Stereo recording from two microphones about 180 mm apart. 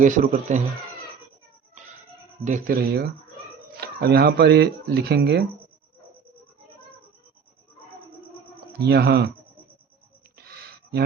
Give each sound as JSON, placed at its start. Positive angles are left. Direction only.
{"t": 0.0, "sound": "speech", "side_deg": -45}
{"t": 2.4, "sound": "speech", "side_deg": -50}
{"t": 8.8, "sound": "speech", "side_deg": -60}
{"t": 10.3, "sound": "a sound", "side_deg": -60}